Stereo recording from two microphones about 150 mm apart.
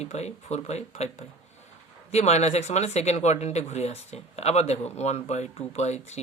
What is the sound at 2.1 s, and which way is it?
Speech, 45° left (ahead or behind).